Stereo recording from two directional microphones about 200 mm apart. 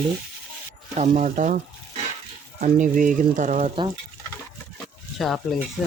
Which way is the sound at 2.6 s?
40° right (ahead or behind).